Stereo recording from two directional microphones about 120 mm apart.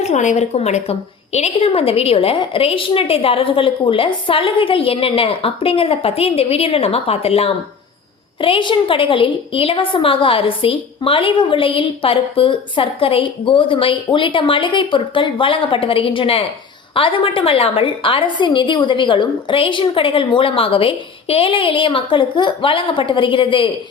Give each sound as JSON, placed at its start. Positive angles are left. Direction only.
{"t": 0.0, "sound": "a woman's voice", "side_deg": 80}